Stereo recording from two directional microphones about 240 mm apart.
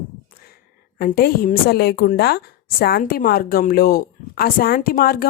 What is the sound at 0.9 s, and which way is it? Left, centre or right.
Speech, left.